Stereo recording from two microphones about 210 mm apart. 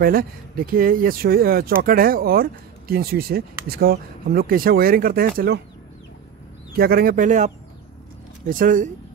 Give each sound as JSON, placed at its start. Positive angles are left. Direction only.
{"t": 0.0, "sound": "speech", "side_deg": -45}
{"t": 6.8, "sound": "speech", "side_deg": -45}